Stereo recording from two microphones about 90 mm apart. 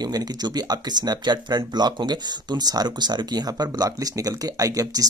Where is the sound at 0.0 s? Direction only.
45° right (ahead or behind).